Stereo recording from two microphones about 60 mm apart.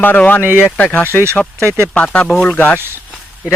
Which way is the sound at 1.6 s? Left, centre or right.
Right.